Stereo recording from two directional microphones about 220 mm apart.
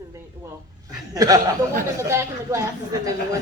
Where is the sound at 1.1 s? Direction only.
15° right (ahead or behind).